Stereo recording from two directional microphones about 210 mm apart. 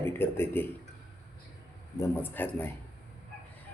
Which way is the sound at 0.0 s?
10° left (ahead or behind).